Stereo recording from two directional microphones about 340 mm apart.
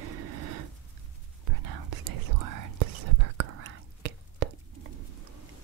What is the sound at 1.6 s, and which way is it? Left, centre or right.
Whispering, right.